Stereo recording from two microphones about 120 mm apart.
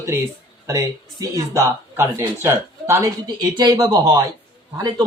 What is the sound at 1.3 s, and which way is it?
Speech, 20° right (ahead or behind).